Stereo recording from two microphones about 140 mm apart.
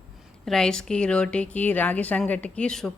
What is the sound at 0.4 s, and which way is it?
A woman's voice, 5° left (ahead or behind).